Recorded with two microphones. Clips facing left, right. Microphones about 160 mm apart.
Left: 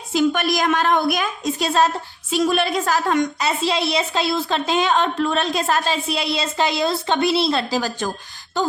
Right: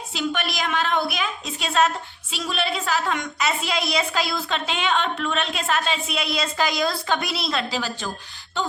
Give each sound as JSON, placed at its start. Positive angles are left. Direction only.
{"t": 0.1, "sound": "a woman's voice", "side_deg": 45}